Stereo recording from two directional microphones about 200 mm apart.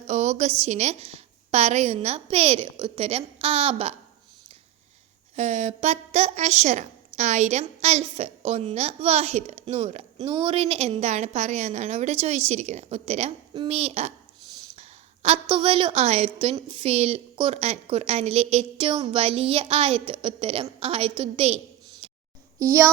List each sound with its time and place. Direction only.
0.1 s a woman's voice: 35° right (ahead or behind)
5.4 s a woman's voice: 35° right (ahead or behind)
22.0 s a sound: 25° right (ahead or behind)